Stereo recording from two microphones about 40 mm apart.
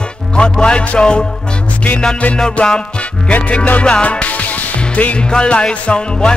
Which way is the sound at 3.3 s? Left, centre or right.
Left.